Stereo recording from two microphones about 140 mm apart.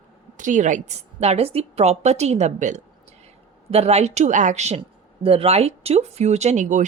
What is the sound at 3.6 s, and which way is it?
A woman's voice, 45° right (ahead or behind).